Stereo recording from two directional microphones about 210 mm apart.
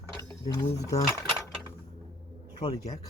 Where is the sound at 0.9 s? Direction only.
15° left (ahead or behind).